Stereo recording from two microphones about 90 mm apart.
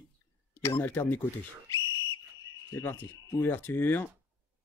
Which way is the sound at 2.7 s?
25° left (ahead or behind).